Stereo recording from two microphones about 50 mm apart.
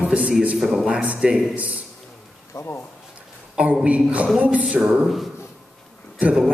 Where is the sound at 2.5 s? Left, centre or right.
Left.